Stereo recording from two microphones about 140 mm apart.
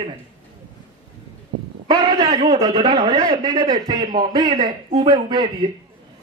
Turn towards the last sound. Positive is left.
turn(degrees=-30)  # may be behind; listen again after turning